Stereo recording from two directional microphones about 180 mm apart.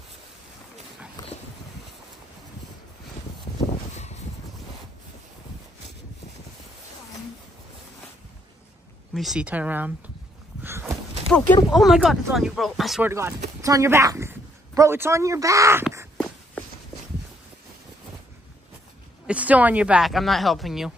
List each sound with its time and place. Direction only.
3.7 s a sound: 40° left (ahead or behind)
9.1 s speech: centre (ahead or behind)
10.6 s a sound: 10° right (ahead or behind)
11.2 s speech: 5° left (ahead or behind)
13.1 s speech: 15° right (ahead or behind)
19.2 s speech: 5° right (ahead or behind)